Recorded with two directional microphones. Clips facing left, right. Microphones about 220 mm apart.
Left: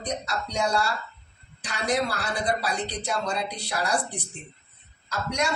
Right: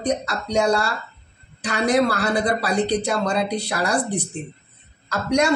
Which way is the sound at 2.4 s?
70° right (ahead or behind).